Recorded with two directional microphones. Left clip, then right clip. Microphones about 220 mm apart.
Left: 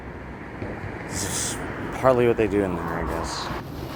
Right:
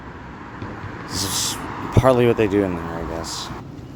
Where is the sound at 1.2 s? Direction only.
35° right (ahead or behind).